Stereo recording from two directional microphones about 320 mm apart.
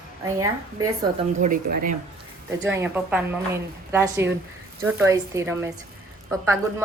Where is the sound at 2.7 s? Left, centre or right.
Centre.